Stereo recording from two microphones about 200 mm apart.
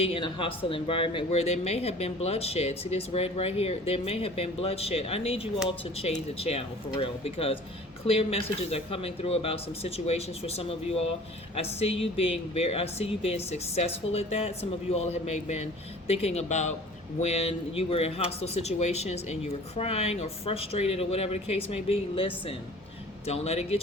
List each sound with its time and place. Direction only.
0.0 s speech: 25° left (ahead or behind)